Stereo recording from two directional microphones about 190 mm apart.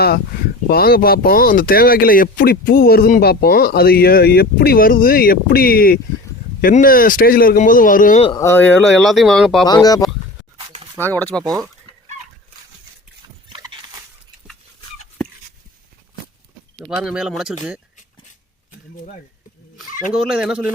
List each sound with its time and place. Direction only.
0.7 s speech: 50° left (ahead or behind)
8.4 s speech: 10° left (ahead or behind)
9.6 s speech: 20° left (ahead or behind)
13.5 s a sound: 20° right (ahead or behind)
17.0 s speech: 5° right (ahead or behind)
19.9 s a sound: 45° left (ahead or behind)
20.3 s speech: 5° right (ahead or behind)